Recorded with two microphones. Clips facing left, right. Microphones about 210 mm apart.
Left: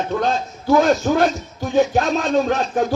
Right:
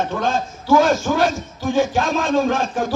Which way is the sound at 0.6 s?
50° left (ahead or behind).